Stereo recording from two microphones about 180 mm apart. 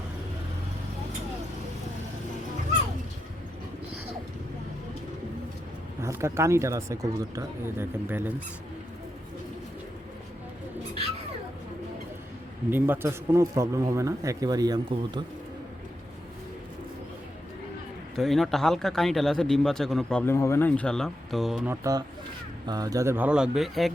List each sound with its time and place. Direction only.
6.0 s a man's voice: 15° right (ahead or behind)
12.7 s a man's voice: 10° right (ahead or behind)
18.2 s speech: centre (ahead or behind)
22.6 s a man's voice: 20° right (ahead or behind); by 23.9 s centre (ahead or behind)